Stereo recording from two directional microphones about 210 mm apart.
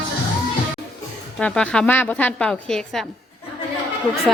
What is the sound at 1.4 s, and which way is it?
A woman's voice, 5° left (ahead or behind).